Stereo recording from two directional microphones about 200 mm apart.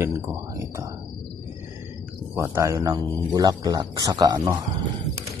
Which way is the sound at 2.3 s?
15° right (ahead or behind).